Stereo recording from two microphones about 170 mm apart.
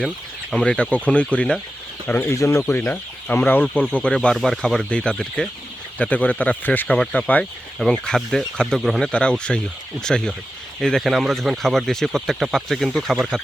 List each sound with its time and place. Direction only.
0.5 s speech: 5° left (ahead or behind)